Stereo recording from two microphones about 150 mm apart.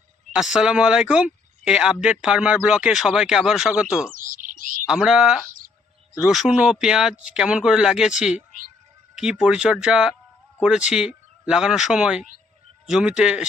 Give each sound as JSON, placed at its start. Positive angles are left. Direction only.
{"t": 0.3, "sound": "speech", "side_deg": -5}
{"t": 4.1, "sound": "bird", "side_deg": -65}
{"t": 4.9, "sound": "speech", "side_deg": -5}